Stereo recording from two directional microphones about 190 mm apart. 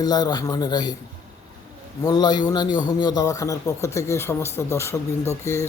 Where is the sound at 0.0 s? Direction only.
20° left (ahead or behind).